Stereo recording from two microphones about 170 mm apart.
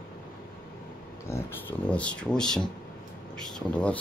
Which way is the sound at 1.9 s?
5° left (ahead or behind).